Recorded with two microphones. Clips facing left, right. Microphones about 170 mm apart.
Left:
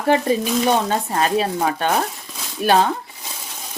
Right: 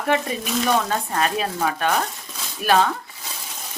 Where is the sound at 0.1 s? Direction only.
30° left (ahead or behind).